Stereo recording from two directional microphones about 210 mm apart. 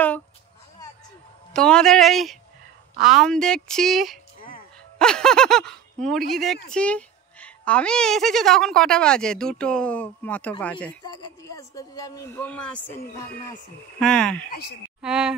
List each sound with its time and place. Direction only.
1.5 s a woman's voice: 5° left (ahead or behind)
11.1 s speech: 15° left (ahead or behind)
13.9 s a woman's voice: 5° left (ahead or behind)